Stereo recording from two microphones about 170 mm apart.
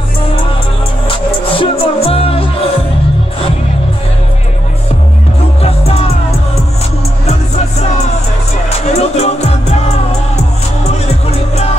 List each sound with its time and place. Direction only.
1.0 s music: 30° left (ahead or behind)
8.6 s music: 40° left (ahead or behind)